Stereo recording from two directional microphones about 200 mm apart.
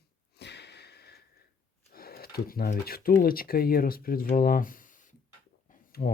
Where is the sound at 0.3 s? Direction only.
55° left (ahead or behind).